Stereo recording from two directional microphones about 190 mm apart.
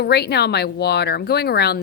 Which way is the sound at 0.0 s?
60° left (ahead or behind).